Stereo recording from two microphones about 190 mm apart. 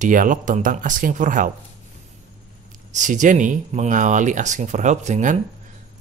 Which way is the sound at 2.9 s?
40° right (ahead or behind).